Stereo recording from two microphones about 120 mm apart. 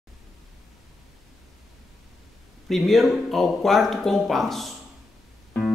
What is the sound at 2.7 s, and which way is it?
Speech, centre (ahead or behind).